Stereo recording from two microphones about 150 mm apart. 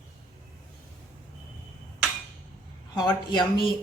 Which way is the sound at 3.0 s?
30° left (ahead or behind).